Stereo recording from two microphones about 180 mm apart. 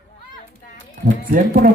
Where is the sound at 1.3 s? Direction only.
50° right (ahead or behind).